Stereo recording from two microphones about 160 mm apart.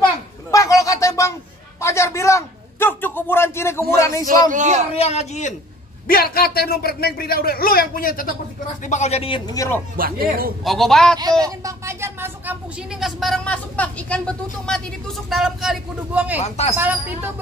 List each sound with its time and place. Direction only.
0.5 s a sound: 20° left (ahead or behind)
1.8 s a man's voice: 15° left (ahead or behind)
4.5 s a man's voice: 50° right (ahead or behind)
4.9 s speech: 40° left (ahead or behind)
6.0 s a man's voice: 70° left (ahead or behind)
8.8 s speech: 45° left (ahead or behind)
9.5 s speech: 20° left (ahead or behind)
9.9 s speech: 65° right (ahead or behind)
10.6 s speech: centre (ahead or behind)
11.4 s speech: 20° right (ahead or behind)
16.3 s speech: 45° left (ahead or behind)
16.7 s speech: 10° right (ahead or behind)